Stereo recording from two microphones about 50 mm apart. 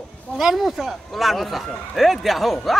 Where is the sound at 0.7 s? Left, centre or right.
Centre.